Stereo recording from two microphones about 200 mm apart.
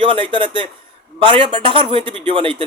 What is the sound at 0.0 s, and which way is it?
Speech, 25° right (ahead or behind).